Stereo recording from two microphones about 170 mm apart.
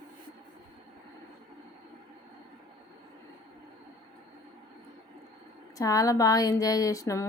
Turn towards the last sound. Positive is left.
turn(degrees=20)  # may be behind; listen again after turning